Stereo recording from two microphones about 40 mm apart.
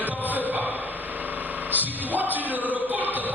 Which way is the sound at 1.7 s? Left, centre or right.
Right.